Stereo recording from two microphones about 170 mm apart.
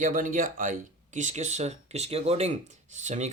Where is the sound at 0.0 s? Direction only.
50° right (ahead or behind).